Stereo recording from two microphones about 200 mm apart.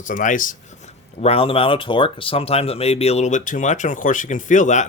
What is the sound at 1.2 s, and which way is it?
Speech, 30° left (ahead or behind).